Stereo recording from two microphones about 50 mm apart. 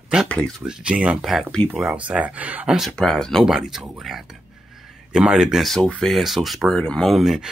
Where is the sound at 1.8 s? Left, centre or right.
Right.